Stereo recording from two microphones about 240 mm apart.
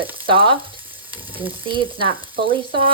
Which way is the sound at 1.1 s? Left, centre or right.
Centre.